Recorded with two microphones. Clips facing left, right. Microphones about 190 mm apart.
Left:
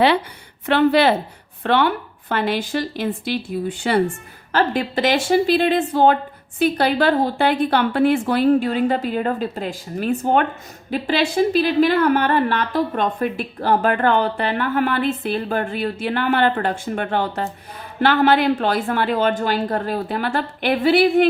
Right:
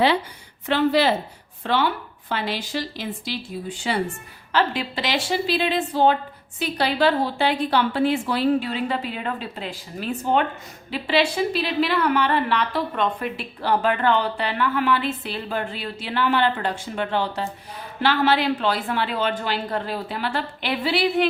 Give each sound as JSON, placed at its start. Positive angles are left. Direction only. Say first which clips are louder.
{"t": 0.7, "sound": "a woman's voice", "louder": "left 4 dB", "side_deg": 60}